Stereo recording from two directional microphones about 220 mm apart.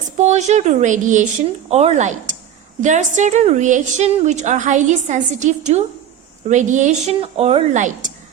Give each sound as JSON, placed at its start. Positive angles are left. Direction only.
{"t": 0.2, "sound": "a woman's voice", "side_deg": -30}